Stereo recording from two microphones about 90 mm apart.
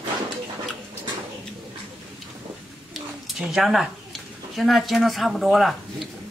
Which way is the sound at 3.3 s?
5° right (ahead or behind).